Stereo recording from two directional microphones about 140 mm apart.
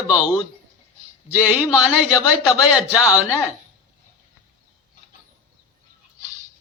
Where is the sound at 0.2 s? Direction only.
30° left (ahead or behind).